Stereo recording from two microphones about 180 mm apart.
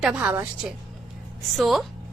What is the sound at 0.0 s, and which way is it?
Speech, 5° right (ahead or behind).